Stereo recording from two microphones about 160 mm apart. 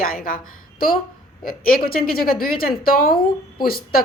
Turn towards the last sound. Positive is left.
turn(degrees=65)  # may be behind; listen again after turning